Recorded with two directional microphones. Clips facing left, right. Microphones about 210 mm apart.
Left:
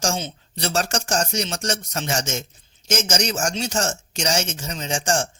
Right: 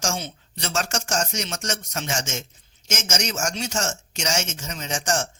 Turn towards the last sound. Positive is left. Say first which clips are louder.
# left 3 dB
turn(degrees=30)  # may be behind; listen again after turning